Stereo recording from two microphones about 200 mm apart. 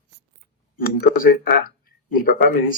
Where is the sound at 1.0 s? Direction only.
45° left (ahead or behind).